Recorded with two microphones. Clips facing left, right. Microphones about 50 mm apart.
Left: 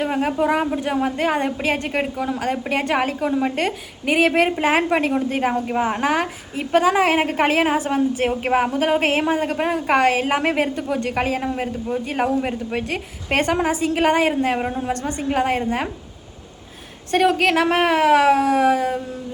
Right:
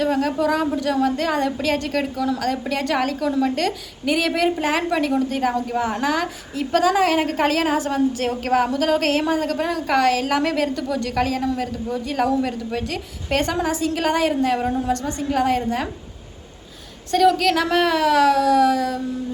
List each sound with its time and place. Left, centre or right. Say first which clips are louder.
0.0 s a woman's voice: even; left
17.1 s a woman's voice: right 1 dB; left